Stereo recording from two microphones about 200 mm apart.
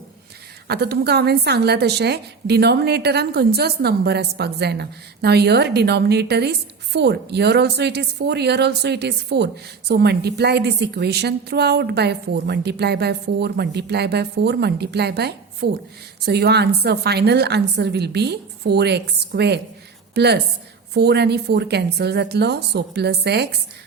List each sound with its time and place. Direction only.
0.7 s a woman's voice: 55° right (ahead or behind)